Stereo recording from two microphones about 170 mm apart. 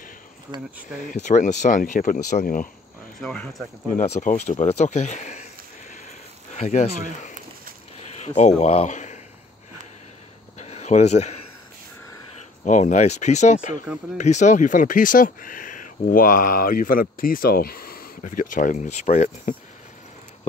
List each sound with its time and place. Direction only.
1.1 s speech: 45° left (ahead or behind)
3.2 s speech: 5° left (ahead or behind)
4.0 s speech: 45° left (ahead or behind)
10.6 s a sound: 40° left (ahead or behind)
12.6 s speech: 45° left (ahead or behind)